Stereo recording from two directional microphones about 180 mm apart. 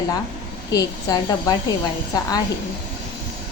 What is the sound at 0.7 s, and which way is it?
Speech, 20° left (ahead or behind).